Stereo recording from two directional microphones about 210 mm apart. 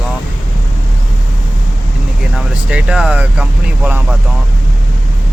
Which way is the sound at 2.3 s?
5° right (ahead or behind).